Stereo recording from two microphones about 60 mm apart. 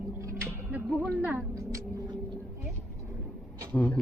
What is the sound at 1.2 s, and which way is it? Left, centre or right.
Speech, right.